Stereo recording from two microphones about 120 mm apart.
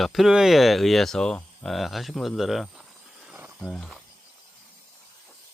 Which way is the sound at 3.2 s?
15° right (ahead or behind).